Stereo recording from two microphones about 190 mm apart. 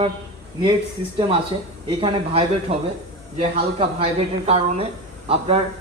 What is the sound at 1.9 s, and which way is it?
Speech, 30° right (ahead or behind).